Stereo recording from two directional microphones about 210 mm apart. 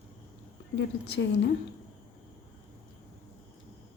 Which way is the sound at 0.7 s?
55° left (ahead or behind).